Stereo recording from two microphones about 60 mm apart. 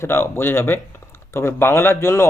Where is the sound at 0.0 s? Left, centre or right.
Left.